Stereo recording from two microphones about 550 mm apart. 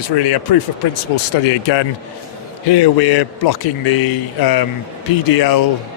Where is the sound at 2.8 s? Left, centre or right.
Left.